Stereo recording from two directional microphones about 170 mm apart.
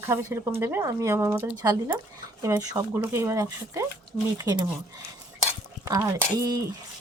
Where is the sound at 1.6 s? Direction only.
20° right (ahead or behind).